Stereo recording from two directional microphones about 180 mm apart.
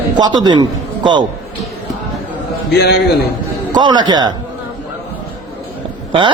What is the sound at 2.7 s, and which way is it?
Speech, 65° left (ahead or behind).